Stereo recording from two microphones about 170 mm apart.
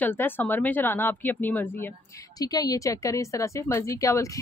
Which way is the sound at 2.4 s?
20° left (ahead or behind).